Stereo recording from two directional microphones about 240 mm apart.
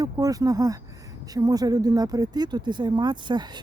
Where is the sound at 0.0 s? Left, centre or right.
Centre.